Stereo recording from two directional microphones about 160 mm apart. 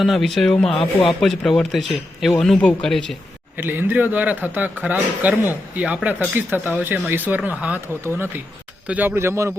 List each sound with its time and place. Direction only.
0.0 s speech: centre (ahead or behind)
3.6 s a man's voice: 10° right (ahead or behind)